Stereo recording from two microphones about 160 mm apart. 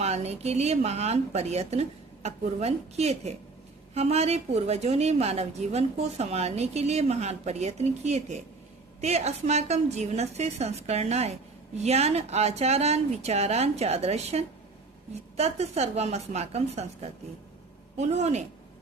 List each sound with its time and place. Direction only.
0.0 s a woman's voice: 45° right (ahead or behind)